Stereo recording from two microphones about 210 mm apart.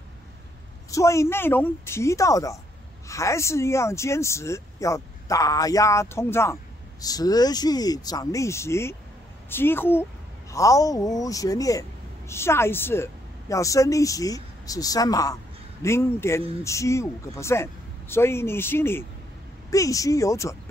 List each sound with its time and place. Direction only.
0.8 s speech: 15° left (ahead or behind)